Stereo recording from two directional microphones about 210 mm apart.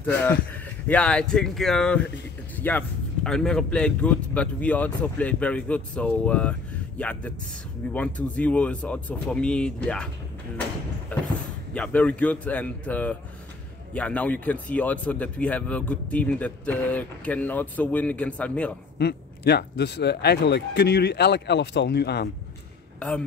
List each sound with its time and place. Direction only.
0.0 s speech: 10° left (ahead or behind)
11.1 s a sound: 5° left (ahead or behind)
11.7 s speech: 5° left (ahead or behind)
18.9 s speech: 50° left (ahead or behind)
22.9 s speech: 5° left (ahead or behind)